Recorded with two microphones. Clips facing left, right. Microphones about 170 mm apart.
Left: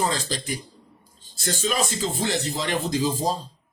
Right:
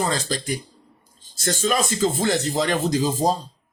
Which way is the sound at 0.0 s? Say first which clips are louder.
Right 2 dB; 45° right (ahead or behind).